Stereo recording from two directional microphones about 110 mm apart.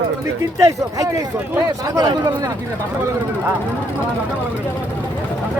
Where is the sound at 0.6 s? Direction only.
30° right (ahead or behind).